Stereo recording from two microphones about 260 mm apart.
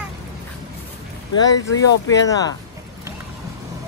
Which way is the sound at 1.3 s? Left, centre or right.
Centre.